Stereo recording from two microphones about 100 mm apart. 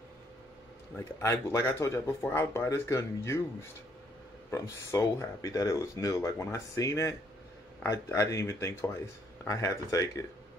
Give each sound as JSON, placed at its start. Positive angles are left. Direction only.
{"t": 0.9, "sound": "speech", "side_deg": 30}
{"t": 4.5, "sound": "speech", "side_deg": 35}